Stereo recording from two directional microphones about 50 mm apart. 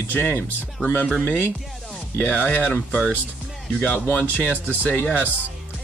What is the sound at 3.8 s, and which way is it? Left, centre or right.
Speech, left.